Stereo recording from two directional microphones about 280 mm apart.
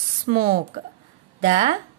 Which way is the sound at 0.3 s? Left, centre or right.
Right.